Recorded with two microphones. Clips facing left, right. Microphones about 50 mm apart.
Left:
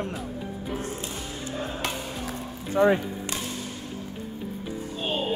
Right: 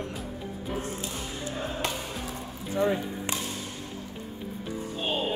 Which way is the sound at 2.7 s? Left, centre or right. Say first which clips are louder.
Left 6 dB; left.